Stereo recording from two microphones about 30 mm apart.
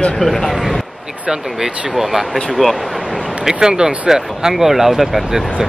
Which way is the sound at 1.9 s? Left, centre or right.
Centre.